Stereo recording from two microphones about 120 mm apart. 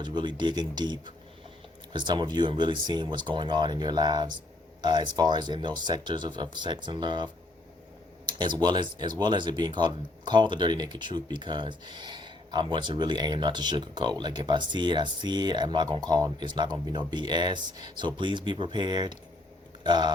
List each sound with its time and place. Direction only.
0.0 s speech: 40° right (ahead or behind)
8.3 s speech: 40° right (ahead or behind)